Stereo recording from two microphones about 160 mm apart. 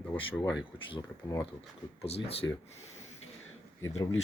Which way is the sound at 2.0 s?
40° left (ahead or behind).